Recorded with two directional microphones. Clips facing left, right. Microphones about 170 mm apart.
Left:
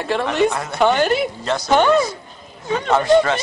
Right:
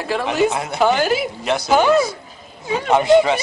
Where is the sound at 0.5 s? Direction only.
15° right (ahead or behind).